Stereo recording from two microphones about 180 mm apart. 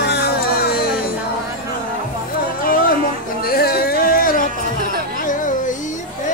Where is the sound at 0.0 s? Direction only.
65° left (ahead or behind).